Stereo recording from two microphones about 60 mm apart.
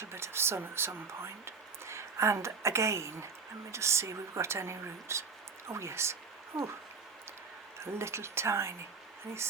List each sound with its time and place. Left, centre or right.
0.0 s speech: right
7.8 s speech: right